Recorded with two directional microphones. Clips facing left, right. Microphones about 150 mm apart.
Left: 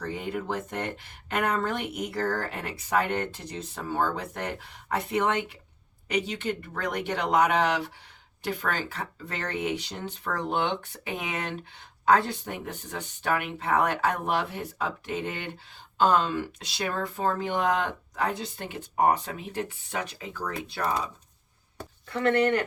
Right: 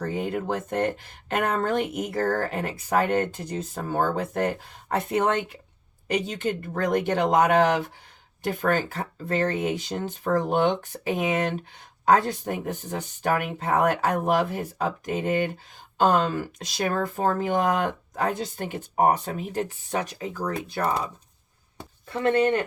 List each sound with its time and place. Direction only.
0.0 s speech: 50° right (ahead or behind)
6.3 s speech: 45° right (ahead or behind)
22.1 s speech: 20° right (ahead or behind)